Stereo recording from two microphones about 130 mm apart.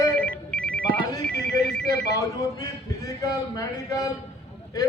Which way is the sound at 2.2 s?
25° left (ahead or behind).